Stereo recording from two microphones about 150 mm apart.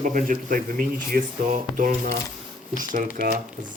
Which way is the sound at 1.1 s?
80° right.